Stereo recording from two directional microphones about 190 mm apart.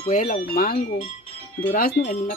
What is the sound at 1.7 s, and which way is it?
Speech, 50° left (ahead or behind).